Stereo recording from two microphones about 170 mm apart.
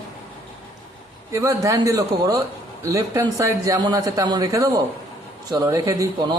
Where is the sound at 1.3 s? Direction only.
20° right (ahead or behind).